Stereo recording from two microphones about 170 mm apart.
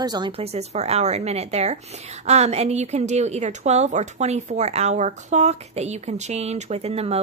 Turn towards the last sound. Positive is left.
turn(degrees=-35)  # may be behind; listen again after turning